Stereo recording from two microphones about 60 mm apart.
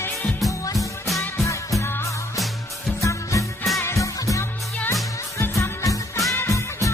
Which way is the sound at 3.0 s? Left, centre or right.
Left.